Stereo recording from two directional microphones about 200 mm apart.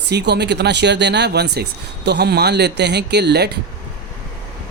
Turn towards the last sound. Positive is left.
turn(degrees=-55)  # may be behind; listen again after turning